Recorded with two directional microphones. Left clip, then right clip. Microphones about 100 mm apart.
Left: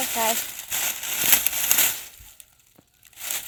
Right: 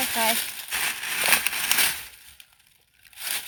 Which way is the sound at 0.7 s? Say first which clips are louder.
Right 2 dB; 90° left.